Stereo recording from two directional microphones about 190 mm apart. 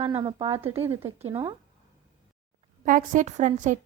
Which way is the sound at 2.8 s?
45° right (ahead or behind).